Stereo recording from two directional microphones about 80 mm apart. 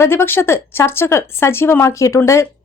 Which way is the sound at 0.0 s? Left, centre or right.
Left.